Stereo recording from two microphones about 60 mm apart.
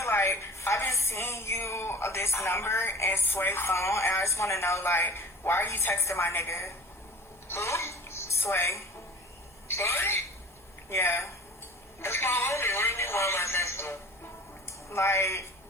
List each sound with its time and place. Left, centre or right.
0.0 s a woman's voice: left
7.4 s television: left
9.6 s speech: left